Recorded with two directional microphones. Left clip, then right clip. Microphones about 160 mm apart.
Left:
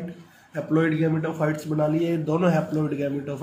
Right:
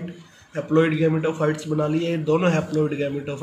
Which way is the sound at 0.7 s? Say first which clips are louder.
Right 4 dB; 5° right (ahead or behind).